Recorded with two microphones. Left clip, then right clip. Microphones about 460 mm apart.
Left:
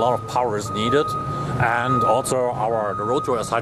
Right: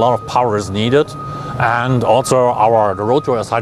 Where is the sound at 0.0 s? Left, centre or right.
Right.